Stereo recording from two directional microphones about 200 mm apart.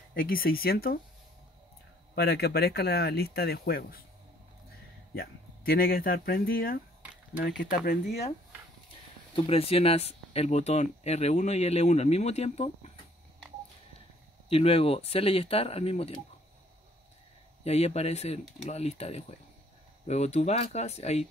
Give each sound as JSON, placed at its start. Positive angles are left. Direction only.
{"t": 0.1, "sound": "speech", "side_deg": 45}
{"t": 2.1, "sound": "speech", "side_deg": 55}
{"t": 5.1, "sound": "speech", "side_deg": 50}
{"t": 9.3, "sound": "speech", "side_deg": 30}
{"t": 14.5, "sound": "speech", "side_deg": 30}
{"t": 17.6, "sound": "speech", "side_deg": 30}